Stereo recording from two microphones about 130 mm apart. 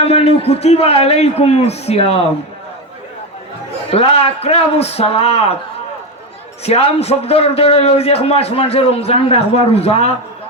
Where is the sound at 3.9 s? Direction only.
50° left (ahead or behind).